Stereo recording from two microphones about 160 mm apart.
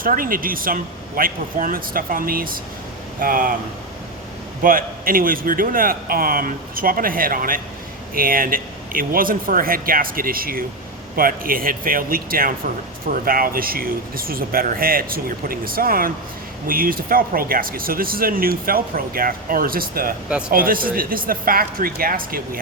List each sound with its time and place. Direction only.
0.0 s speech: 60° right (ahead or behind)
4.6 s speech: 65° right (ahead or behind)